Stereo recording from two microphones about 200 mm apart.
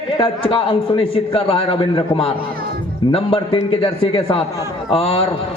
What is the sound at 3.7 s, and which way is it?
A man's voice, 30° left (ahead or behind).